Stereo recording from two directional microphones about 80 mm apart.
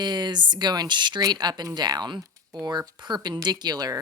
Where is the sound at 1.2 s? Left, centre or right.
Right.